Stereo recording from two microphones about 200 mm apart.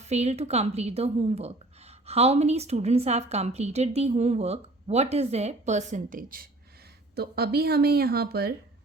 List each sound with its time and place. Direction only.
0.0 s speech: 35° right (ahead or behind); by 8.5 s 50° right (ahead or behind)